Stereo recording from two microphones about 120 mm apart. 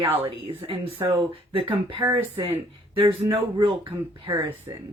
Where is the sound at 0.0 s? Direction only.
50° right (ahead or behind).